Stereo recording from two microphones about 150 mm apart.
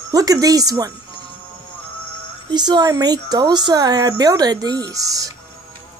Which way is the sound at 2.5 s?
30° right (ahead or behind).